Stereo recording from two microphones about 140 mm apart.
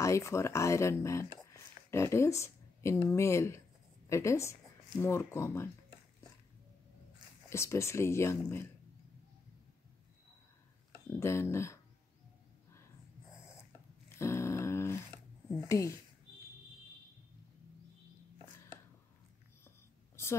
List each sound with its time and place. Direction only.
0.0 s speech: 20° left (ahead or behind)
1.5 s a sound: 20° left (ahead or behind)
3.1 s speech: 20° left (ahead or behind)
7.4 s speech: 20° left (ahead or behind)
11.1 s speech: 20° left (ahead or behind)
14.0 s a sound: 20° left (ahead or behind)
15.5 s speech: 20° left (ahead or behind)